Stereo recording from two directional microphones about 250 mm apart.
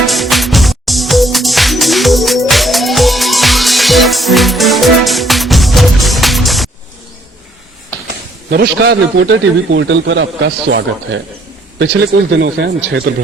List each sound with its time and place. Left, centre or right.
0.0 s music: centre
8.4 s a man's voice: right
12.4 s a man's voice: right